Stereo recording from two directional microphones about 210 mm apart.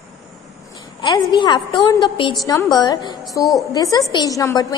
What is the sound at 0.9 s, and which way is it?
A woman's voice, 20° left (ahead or behind).